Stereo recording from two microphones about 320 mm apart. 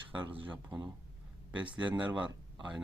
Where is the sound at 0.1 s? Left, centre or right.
Centre.